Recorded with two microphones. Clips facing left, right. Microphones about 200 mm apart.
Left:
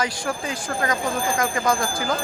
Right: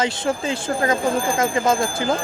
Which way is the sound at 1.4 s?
25° right (ahead or behind).